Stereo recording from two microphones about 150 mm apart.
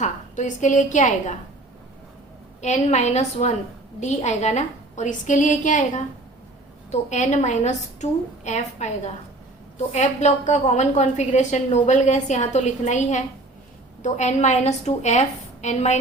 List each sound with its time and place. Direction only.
0.0 s a woman's voice: 55° left (ahead or behind)
2.6 s a woman's voice: 50° left (ahead or behind)
6.9 s a woman's voice: 50° left (ahead or behind)